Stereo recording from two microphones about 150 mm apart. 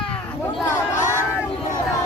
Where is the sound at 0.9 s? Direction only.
55° left (ahead or behind).